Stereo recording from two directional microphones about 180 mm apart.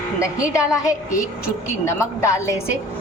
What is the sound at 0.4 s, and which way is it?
Speech, 5° right (ahead or behind).